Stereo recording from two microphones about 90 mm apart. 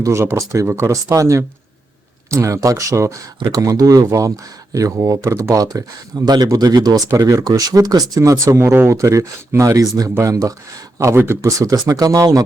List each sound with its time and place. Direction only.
0.0 s speech: 30° right (ahead or behind)